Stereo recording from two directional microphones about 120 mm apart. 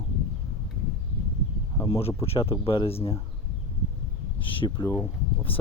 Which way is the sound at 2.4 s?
45° left (ahead or behind).